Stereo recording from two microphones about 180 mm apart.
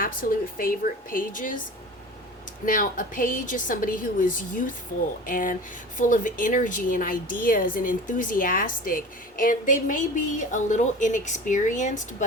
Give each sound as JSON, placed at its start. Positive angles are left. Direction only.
{"t": 0.0, "sound": "a woman's voice", "side_deg": 50}
{"t": 2.6, "sound": "a woman's voice", "side_deg": 50}